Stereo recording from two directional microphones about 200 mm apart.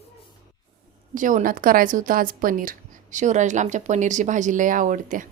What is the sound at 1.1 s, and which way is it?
A woman's voice, 40° right (ahead or behind).